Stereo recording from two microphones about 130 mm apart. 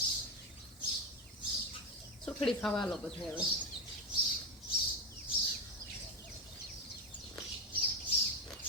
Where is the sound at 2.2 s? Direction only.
5° left (ahead or behind).